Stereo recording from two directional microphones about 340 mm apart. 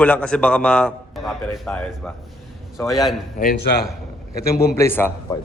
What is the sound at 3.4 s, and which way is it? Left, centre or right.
A man's voice, left.